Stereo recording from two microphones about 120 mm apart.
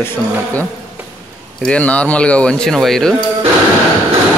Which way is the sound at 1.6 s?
10° left (ahead or behind).